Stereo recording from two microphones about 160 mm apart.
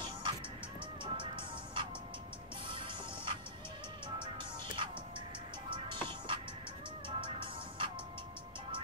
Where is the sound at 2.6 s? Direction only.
30° right (ahead or behind).